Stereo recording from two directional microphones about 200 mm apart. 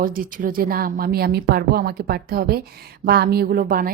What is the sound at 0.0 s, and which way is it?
A woman's voice, 45° right (ahead or behind).